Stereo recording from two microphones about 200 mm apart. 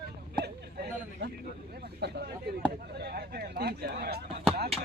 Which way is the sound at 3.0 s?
55° right (ahead or behind).